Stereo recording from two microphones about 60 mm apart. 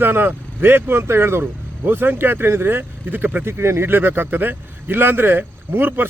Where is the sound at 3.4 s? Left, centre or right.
Right.